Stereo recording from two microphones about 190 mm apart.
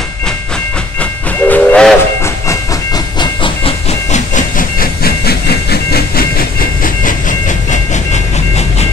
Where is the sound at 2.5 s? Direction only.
20° left (ahead or behind); by 7.1 s 50° left (ahead or behind).